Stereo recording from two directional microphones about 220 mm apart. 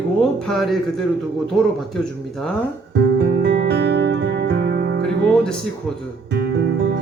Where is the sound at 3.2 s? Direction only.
50° right (ahead or behind).